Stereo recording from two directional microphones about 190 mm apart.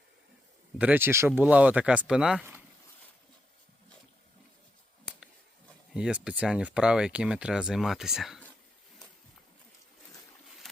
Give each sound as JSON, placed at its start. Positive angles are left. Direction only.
{"t": 0.8, "sound": "speech", "side_deg": -10}
{"t": 5.9, "sound": "speech", "side_deg": -5}